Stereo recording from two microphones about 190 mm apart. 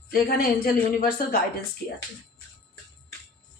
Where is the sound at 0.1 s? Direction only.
55° left (ahead or behind).